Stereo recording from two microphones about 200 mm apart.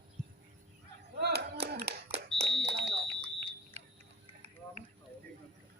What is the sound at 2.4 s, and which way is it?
Smoke detector, 60° right (ahead or behind).